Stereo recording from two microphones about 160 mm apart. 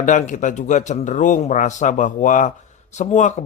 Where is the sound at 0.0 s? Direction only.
50° left (ahead or behind).